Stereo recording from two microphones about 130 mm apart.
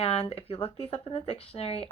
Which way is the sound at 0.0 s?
50° left (ahead or behind).